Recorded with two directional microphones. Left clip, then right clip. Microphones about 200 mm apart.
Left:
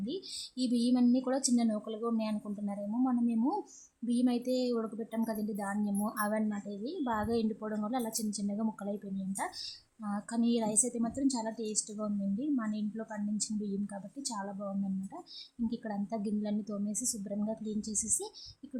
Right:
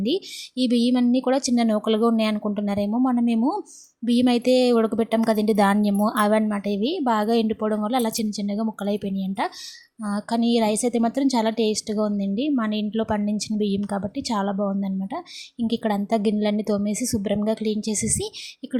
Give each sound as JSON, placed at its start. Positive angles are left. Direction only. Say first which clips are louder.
{"t": 0.0, "sound": "a woman's voice", "louder": "right 14 dB", "side_deg": -30}